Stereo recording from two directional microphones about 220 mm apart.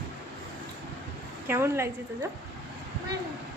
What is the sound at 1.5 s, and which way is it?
Speech, 10° right (ahead or behind).